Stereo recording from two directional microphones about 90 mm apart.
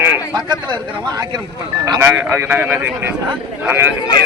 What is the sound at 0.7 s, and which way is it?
Speech, 50° right (ahead or behind).